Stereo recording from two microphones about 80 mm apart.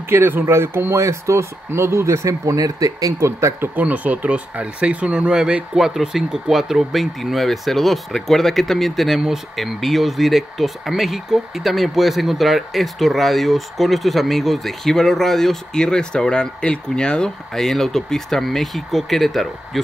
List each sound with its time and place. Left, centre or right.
0.1 s speech: right
3.7 s speech: centre